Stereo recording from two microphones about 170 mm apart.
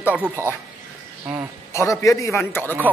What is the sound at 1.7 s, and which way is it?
A man's voice, 20° left (ahead or behind).